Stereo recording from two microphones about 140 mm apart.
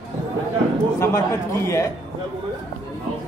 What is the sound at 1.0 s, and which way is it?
Speech, 20° left (ahead or behind).